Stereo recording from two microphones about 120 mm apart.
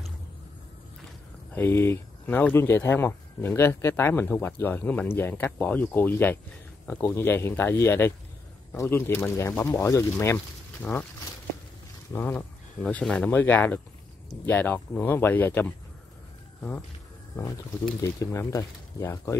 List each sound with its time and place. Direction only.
1.5 s speech: 20° left (ahead or behind)
12.1 s speech: 15° left (ahead or behind)
18.2 s speech: 25° left (ahead or behind)